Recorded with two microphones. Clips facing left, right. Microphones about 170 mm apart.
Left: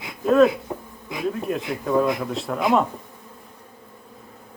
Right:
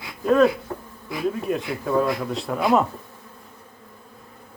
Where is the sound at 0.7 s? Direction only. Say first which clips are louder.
Left 1 dB; 15° left (ahead or behind).